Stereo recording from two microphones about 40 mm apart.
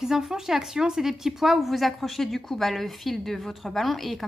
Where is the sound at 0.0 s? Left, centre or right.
Centre.